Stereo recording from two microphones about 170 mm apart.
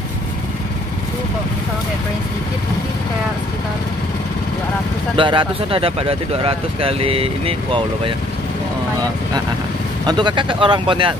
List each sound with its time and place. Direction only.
5.1 s speech: 30° right (ahead or behind)
10.0 s speech: 25° right (ahead or behind)